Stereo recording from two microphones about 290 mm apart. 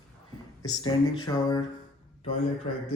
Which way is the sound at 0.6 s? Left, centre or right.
Centre.